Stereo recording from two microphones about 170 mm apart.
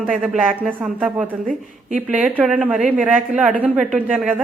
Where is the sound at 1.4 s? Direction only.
50° right (ahead or behind).